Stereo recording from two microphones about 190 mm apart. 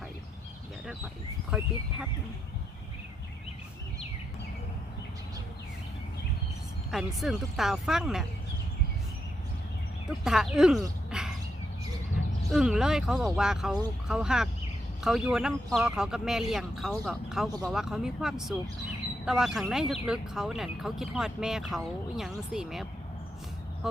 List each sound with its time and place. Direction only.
1.5 s speech: 5° right (ahead or behind)
6.9 s speech: centre (ahead or behind)
10.1 s speech: centre (ahead or behind)
11.1 s a sound: 5° right (ahead or behind)
12.5 s speech: 5° right (ahead or behind)